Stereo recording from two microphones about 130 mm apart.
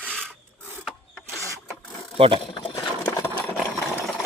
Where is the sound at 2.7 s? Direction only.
20° left (ahead or behind).